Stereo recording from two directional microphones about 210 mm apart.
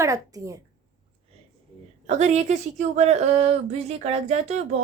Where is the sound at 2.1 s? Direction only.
35° right (ahead or behind).